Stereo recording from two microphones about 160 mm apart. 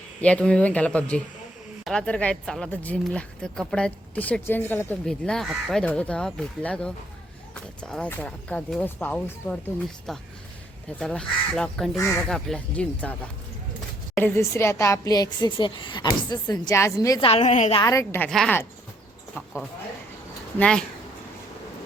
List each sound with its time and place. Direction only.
0.2 s speech: 5° left (ahead or behind)
11.9 s speech: 15° left (ahead or behind)
14.2 s a woman's voice: 15° left (ahead or behind)
17.2 s a woman's voice: 35° left (ahead or behind)
17.7 s a woman's voice: 20° left (ahead or behind)
18.3 s speech: 5° left (ahead or behind)
20.6 s speech: 5° left (ahead or behind)